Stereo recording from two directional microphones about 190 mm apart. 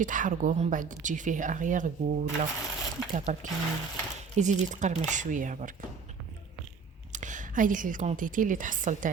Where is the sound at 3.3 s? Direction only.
40° right (ahead or behind).